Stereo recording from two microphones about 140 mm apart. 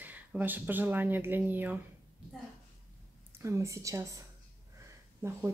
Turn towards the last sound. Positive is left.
turn(degrees=-20)  # may be behind; listen again after turning